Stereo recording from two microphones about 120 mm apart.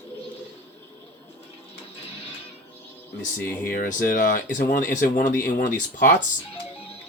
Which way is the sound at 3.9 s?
90° left.